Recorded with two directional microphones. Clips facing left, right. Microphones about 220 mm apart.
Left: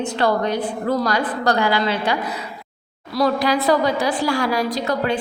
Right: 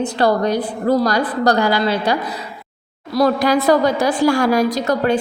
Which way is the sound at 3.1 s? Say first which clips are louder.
Right 4 dB; 45° right (ahead or behind).